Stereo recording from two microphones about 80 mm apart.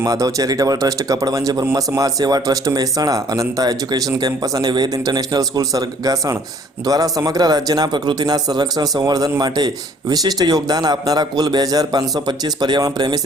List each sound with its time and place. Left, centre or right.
0.0 s speech: right